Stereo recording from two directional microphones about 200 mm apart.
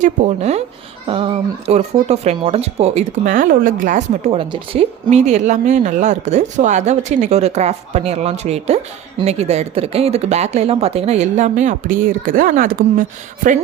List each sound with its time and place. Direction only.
0.0 s speech: 35° right (ahead or behind)